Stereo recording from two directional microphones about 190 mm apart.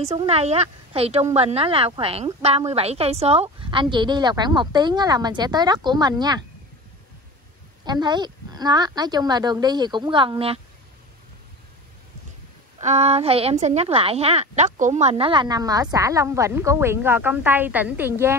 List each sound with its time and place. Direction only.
0.0 s a woman's voice: 30° right (ahead or behind)
7.8 s speech: 20° right (ahead or behind)
12.7 s speech: 35° right (ahead or behind); by 18.3 s 10° right (ahead or behind)